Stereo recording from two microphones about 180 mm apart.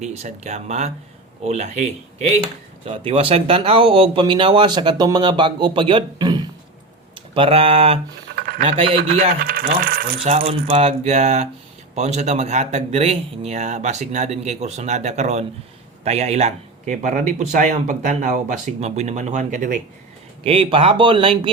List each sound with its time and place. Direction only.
0.0 s a man's voice: 40° right (ahead or behind)
8.4 s a sound: 55° right (ahead or behind)
8.6 s a man's voice: 30° right (ahead or behind)
9.0 s speech: 55° right (ahead or behind)
10.4 s a man's voice: 35° right (ahead or behind)
20.4 s speech: 30° right (ahead or behind)